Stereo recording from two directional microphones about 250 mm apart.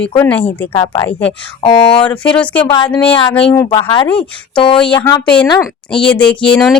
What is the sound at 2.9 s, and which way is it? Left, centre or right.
Speech, centre.